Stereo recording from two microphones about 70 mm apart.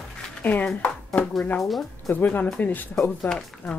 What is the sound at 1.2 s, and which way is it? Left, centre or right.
Speech, centre.